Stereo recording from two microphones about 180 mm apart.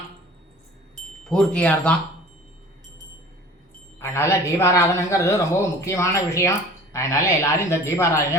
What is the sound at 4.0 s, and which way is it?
A man's voice, 15° left (ahead or behind).